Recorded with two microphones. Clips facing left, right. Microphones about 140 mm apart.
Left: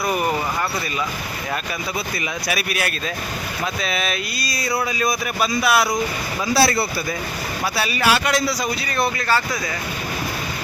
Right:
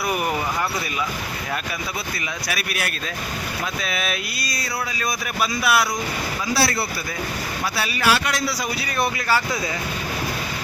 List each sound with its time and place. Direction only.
2.5 s speech: 5° left (ahead or behind)
6.6 s speech: 25° left (ahead or behind)
7.8 s speech: 5° left (ahead or behind)